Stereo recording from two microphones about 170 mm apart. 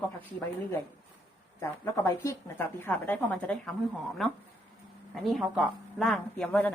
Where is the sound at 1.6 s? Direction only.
20° left (ahead or behind).